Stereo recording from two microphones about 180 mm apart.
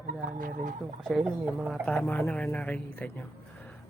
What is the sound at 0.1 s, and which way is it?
Speech, 50° right (ahead or behind).